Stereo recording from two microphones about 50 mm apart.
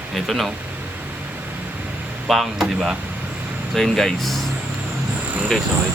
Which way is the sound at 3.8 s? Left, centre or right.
Centre.